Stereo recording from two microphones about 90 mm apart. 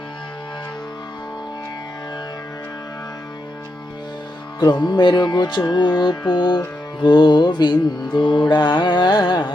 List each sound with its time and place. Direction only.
4.6 s music: 55° left (ahead or behind)